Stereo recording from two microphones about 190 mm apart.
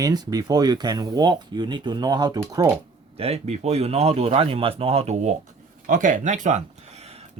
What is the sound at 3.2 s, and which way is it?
Speech, 35° right (ahead or behind).